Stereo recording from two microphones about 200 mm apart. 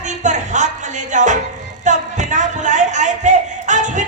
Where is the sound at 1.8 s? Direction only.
40° right (ahead or behind).